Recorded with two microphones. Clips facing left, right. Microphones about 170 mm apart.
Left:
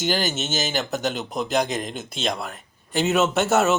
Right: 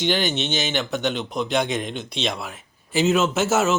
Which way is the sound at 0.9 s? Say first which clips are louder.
Right 1 dB; centre (ahead or behind).